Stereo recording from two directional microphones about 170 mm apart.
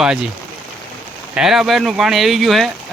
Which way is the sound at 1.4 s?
Centre (ahead or behind).